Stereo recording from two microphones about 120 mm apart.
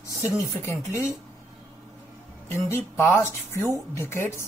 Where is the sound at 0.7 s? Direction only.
25° left (ahead or behind).